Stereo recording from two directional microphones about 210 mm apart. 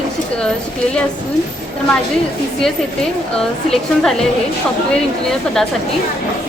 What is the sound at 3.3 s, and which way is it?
Speech, 5° left (ahead or behind).